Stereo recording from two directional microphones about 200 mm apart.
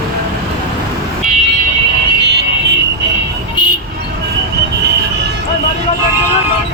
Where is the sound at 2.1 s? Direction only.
60° right (ahead or behind).